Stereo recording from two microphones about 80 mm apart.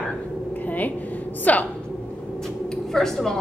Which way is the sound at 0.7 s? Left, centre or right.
Left.